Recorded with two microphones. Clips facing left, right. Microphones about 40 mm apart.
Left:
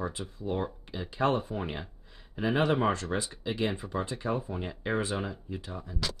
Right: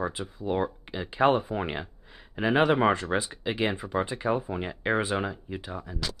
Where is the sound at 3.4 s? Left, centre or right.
Right.